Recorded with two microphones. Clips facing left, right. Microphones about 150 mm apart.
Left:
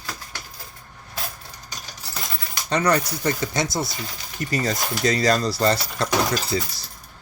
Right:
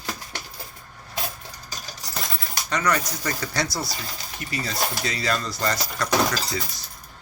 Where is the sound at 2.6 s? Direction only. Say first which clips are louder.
Left 4 dB; 30° left (ahead or behind).